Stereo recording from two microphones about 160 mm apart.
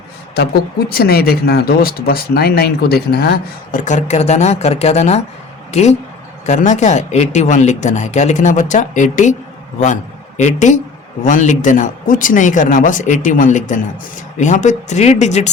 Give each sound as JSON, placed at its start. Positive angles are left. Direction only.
{"t": 0.3, "sound": "speech", "side_deg": 75}
{"t": 3.8, "sound": "a man's voice", "side_deg": 50}